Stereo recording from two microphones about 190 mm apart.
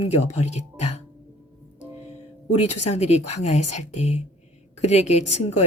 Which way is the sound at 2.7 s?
35° left (ahead or behind).